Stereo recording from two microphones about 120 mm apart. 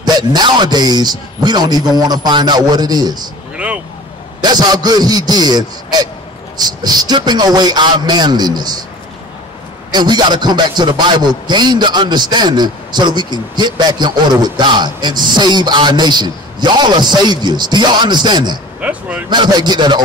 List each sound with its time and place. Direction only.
0.0 s a man's voice: 35° right (ahead or behind)
3.5 s vehicle: 10° right (ahead or behind)
4.4 s a man's voice: 35° right (ahead or behind)
9.8 s a man's voice: 35° right (ahead or behind)
18.8 s speech: 10° right (ahead or behind)
19.2 s a man's voice: 40° right (ahead or behind)